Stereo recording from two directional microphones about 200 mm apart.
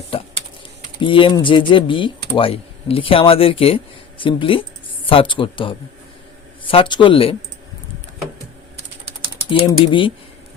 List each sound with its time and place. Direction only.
0.9 s speech: 25° left (ahead or behind)
9.5 s speech: 25° left (ahead or behind)